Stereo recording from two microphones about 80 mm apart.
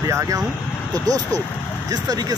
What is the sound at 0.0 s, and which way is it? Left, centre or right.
Speech, right.